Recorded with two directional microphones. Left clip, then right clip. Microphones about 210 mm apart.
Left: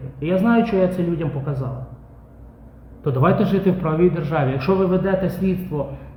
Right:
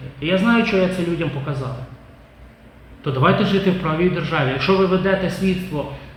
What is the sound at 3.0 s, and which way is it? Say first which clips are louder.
A man's voice: right 1 dB; 55° left (ahead or behind).